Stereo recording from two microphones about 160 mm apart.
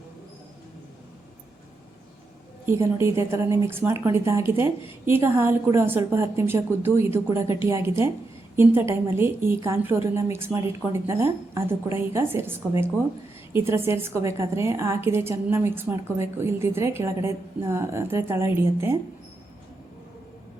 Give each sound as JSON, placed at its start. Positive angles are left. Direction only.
{"t": 2.6, "sound": "a woman's voice", "side_deg": -15}